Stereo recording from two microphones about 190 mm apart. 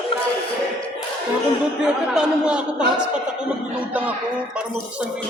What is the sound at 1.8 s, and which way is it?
Speech, 5° right (ahead or behind).